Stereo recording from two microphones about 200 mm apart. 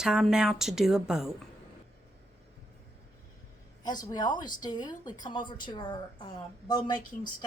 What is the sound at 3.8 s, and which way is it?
Speech, 20° left (ahead or behind).